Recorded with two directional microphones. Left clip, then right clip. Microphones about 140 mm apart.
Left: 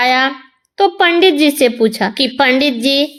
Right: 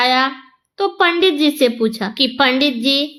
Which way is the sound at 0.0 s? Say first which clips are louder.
Left 2 dB; 45° left (ahead or behind).